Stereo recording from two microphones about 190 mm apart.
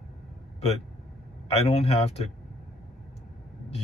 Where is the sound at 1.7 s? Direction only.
30° left (ahead or behind).